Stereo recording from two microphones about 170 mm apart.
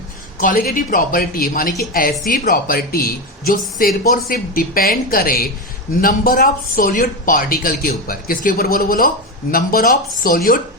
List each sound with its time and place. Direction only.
0.3 s speech: 60° left (ahead or behind)